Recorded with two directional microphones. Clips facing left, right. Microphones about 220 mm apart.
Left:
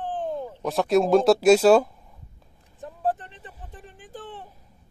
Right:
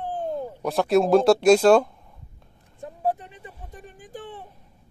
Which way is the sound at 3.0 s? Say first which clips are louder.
Right 1 dB; 10° right (ahead or behind).